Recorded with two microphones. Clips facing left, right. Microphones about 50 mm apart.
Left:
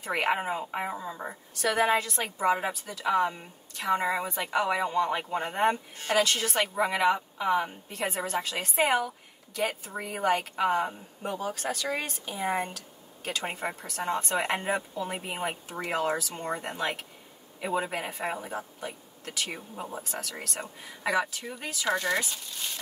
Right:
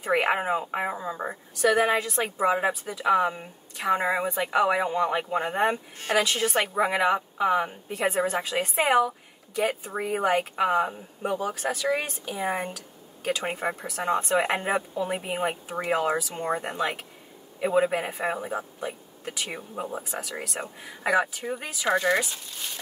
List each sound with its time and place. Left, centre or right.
0.0 s speech: centre
1.8 s speech: centre
9.6 s speech: right
9.9 s speech: centre
11.5 s speech: right
12.4 s speech: centre
20.0 s speech: centre